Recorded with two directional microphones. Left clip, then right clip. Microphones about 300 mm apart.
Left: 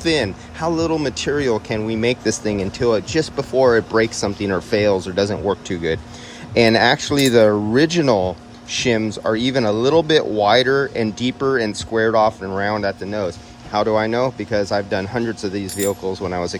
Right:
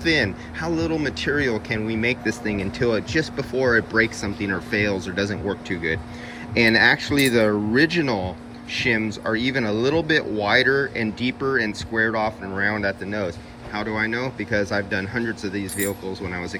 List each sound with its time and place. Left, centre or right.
0.0 s speech: centre